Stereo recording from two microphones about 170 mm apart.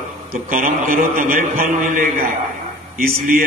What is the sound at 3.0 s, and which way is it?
Speech, 55° right (ahead or behind).